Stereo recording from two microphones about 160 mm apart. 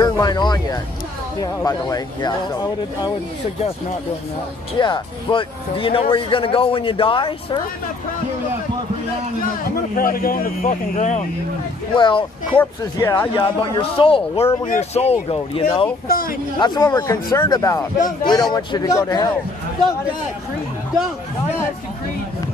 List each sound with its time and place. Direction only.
0.0 s speech: 25° left (ahead or behind)
4.7 s speech: 30° left (ahead or behind)
9.9 s speech: 65° left (ahead or behind); by 11.2 s 50° left (ahead or behind)
11.9 s speech: 30° left (ahead or behind)
12.5 s speech: 15° left (ahead or behind)
13.4 s speech: 35° left (ahead or behind)
16.1 s speech: 65° left (ahead or behind)
16.5 s speech: 25° left (ahead or behind)